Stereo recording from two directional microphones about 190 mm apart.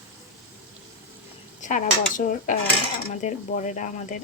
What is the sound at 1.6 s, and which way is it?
Speech, 40° left (ahead or behind).